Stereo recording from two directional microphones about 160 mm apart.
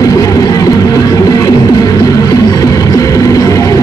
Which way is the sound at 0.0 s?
25° left (ahead or behind).